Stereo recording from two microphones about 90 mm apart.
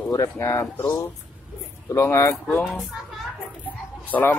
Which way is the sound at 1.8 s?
30° left (ahead or behind).